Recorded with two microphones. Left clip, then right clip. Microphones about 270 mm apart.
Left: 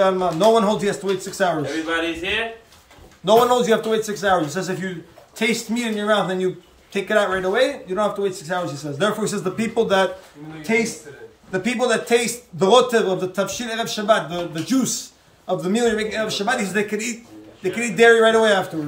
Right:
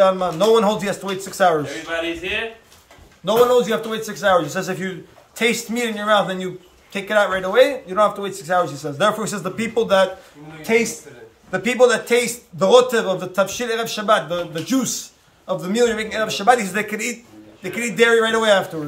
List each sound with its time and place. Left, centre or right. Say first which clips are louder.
0.0 s a man's voice: right 1 dB; centre
3.3 s a man's voice: even; centre